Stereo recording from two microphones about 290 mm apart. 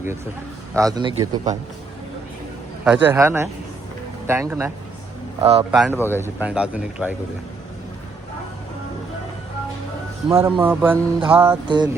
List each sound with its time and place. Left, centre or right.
0.8 s a man's voice: centre
2.8 s a man's voice: centre
5.7 s speech: centre
6.2 s speech: centre
10.2 s a man's voice: centre
10.6 s a man's voice: centre